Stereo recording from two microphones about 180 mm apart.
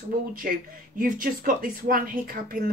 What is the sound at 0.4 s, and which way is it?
A woman's voice, 50° right (ahead or behind).